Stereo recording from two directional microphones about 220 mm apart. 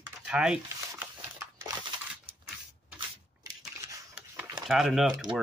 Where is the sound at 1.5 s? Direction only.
15° right (ahead or behind).